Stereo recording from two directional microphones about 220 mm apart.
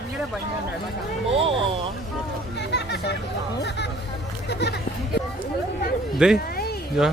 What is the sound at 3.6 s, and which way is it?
Music, 50° left (ahead or behind).